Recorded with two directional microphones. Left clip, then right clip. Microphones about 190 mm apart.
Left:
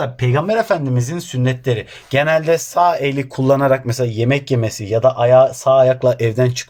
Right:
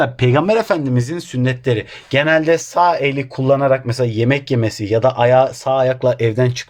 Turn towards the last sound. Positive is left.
turn(degrees=-5)  # may be behind; listen again after turning